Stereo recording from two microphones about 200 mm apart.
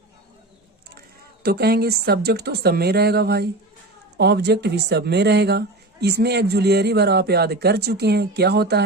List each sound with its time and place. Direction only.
0.9 s a woman's voice: 50° right (ahead or behind)